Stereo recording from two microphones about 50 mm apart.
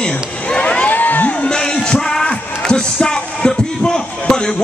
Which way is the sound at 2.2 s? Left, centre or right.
Left.